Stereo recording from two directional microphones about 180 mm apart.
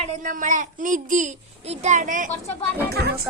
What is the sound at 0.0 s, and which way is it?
A child's voice, 45° right (ahead or behind).